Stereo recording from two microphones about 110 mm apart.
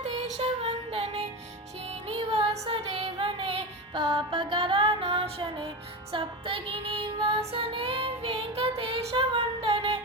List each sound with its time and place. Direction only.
0.0 s music: 70° right (ahead or behind); by 5.6 s 50° right (ahead or behind)
6.1 s child singing: 55° right (ahead or behind)